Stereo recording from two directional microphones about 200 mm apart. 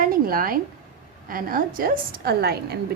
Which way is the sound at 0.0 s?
45° right (ahead or behind).